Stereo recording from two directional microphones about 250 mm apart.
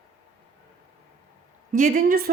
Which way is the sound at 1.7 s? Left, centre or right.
Right.